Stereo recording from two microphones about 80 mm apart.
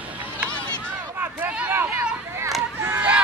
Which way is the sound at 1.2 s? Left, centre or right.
Centre.